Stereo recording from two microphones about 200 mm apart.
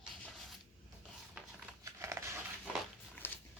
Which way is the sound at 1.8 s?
15° right (ahead or behind).